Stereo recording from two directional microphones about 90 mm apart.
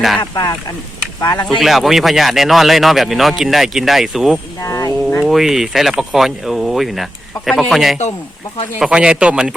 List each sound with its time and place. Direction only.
0.2 s speech: 55° left (ahead or behind)
1.5 s speech: centre (ahead or behind)
4.6 s speech: 40° left (ahead or behind)
5.2 s speech: 5° right (ahead or behind)